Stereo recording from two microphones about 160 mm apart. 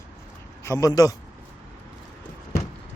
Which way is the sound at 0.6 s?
20° left (ahead or behind).